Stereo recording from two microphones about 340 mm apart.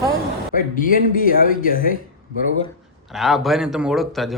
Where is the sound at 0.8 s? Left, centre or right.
Left.